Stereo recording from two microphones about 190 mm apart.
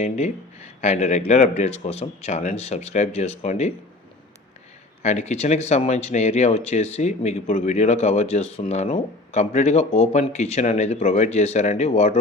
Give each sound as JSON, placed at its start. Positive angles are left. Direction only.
{"t": 0.0, "sound": "speech", "side_deg": 35}
{"t": 5.0, "sound": "speech", "side_deg": 35}